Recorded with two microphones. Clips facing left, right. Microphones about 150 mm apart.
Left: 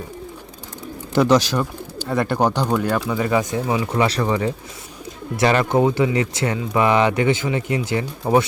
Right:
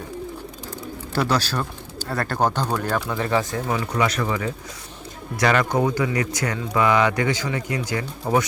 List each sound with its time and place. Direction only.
1.1 s speech: 15° left (ahead or behind)
3.9 s speech: 30° left (ahead or behind)